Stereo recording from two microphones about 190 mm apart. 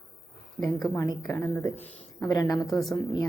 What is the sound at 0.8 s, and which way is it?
A woman's voice, 20° left (ahead or behind).